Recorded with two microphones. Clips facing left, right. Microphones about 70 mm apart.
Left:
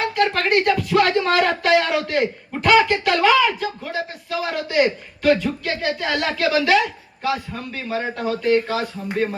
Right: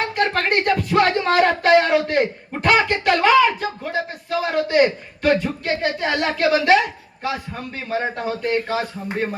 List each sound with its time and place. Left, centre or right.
0.2 s speech: right